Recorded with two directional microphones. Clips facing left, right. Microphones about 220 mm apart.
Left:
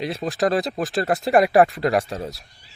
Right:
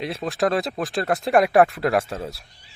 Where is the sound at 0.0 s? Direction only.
Centre (ahead or behind).